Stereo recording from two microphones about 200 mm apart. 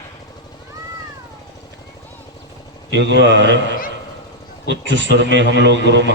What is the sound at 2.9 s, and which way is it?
Speech, 65° right (ahead or behind).